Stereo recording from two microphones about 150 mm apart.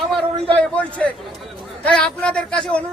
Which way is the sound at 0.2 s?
35° right (ahead or behind).